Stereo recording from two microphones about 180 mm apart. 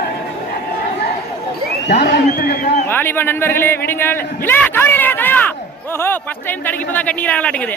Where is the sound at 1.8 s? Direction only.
70° left (ahead or behind).